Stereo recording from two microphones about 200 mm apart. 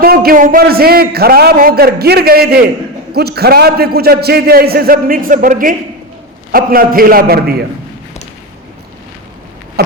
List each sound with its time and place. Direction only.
0.0 s a man's voice: 50° right (ahead or behind)